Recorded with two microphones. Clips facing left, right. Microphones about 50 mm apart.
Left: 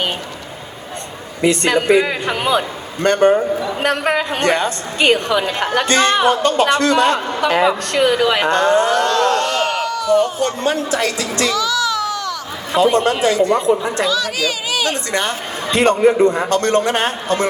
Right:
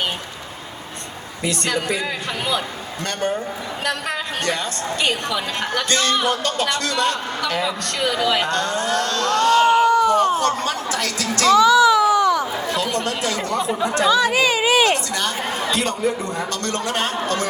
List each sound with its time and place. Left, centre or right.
1.4 s a woman's voice: left
9.8 s a sound: right
10.4 s speech: left
11.5 s baby cry: right
12.7 s speech: left
14.1 s a woman's voice: right
15.7 s a woman's voice: left